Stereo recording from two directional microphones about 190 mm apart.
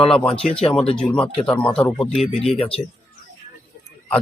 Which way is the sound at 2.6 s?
30° left (ahead or behind).